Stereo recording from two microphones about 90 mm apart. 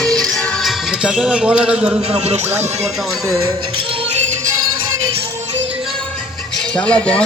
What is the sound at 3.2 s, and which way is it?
Speech, 35° right (ahead or behind).